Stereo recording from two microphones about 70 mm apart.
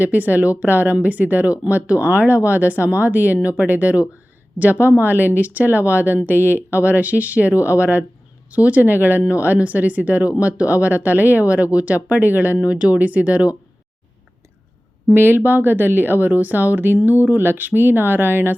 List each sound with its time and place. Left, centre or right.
0.0 s speech: right
15.1 s speech: right